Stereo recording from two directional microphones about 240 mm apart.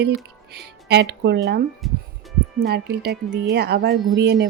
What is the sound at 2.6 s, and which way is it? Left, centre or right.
Speech, right.